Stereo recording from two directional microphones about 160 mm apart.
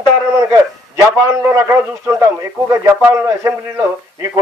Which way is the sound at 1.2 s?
15° right (ahead or behind).